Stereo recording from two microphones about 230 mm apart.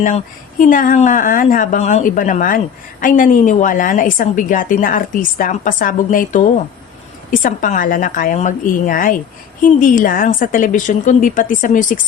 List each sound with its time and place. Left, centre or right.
0.6 s a woman's voice: left